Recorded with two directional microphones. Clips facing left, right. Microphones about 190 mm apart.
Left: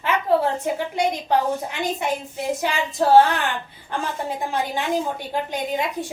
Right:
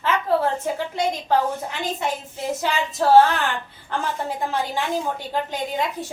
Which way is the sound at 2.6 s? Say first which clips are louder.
Right 1 dB; 15° left (ahead or behind).